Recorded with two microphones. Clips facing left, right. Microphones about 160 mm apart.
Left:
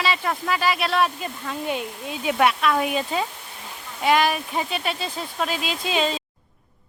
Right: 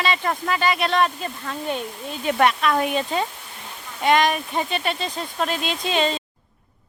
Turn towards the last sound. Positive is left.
turn(degrees=0)  # may be behind; listen again after turning